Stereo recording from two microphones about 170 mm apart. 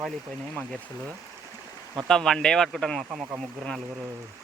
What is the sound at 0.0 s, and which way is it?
Speech, centre (ahead or behind).